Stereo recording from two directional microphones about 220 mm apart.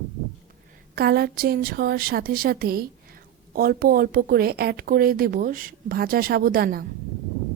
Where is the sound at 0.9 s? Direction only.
45° right (ahead or behind).